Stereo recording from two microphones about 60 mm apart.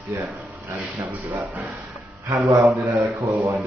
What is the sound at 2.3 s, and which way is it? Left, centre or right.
A man's voice, right.